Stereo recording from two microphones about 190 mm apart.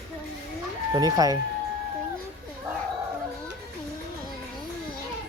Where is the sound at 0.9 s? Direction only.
20° right (ahead or behind).